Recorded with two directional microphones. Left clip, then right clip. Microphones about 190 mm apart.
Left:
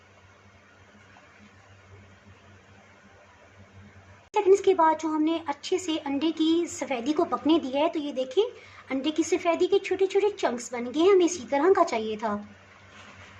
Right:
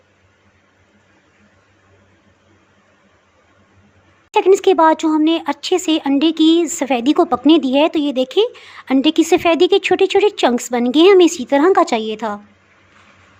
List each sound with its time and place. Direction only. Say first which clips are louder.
4.3 s speech: right 9 dB; 45° right (ahead or behind)